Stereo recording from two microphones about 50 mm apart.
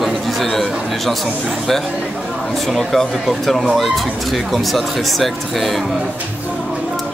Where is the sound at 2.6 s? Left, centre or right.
Centre.